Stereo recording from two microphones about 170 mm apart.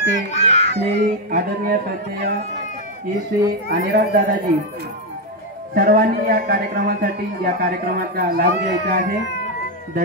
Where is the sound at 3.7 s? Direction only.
70° right (ahead or behind).